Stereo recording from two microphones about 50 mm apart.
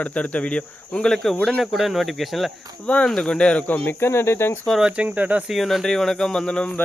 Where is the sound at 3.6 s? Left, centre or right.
Left.